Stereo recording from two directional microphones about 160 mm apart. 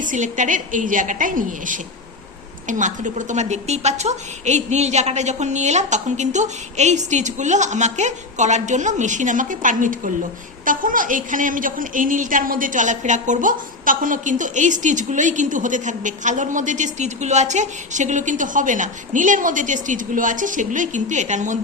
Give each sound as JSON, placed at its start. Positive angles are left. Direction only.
{"t": 0.0, "sound": "a woman's voice", "side_deg": -55}